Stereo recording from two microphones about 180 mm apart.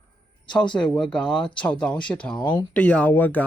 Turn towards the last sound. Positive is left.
turn(degrees=10)  # may be behind; listen again after turning